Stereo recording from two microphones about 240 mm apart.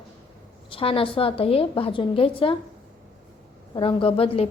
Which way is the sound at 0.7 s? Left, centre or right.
Left.